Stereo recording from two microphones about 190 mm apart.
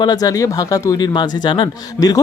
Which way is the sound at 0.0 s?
20° left (ahead or behind).